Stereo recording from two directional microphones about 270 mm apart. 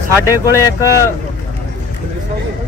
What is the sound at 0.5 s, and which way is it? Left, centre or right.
Speech, centre.